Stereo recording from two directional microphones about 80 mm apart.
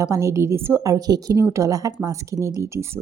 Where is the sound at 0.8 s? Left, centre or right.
Right.